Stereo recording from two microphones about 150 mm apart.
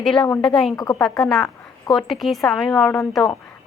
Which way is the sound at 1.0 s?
Centre (ahead or behind).